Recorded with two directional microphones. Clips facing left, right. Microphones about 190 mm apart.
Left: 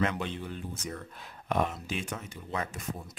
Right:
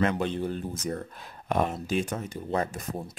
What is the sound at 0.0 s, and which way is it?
Speech, 40° right (ahead or behind).